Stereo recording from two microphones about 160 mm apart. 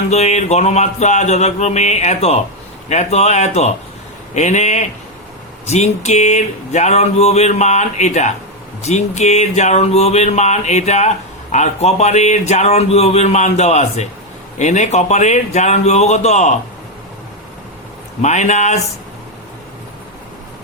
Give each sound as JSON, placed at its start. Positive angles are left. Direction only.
{"t": 0.1, "sound": "speech", "side_deg": 45}
{"t": 18.2, "sound": "speech", "side_deg": 45}